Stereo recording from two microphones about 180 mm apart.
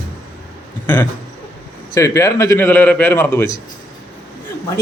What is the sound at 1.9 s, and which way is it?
Speech, 15° left (ahead or behind).